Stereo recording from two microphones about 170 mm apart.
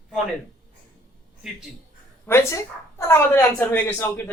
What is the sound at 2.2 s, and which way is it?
Speech, 15° left (ahead or behind).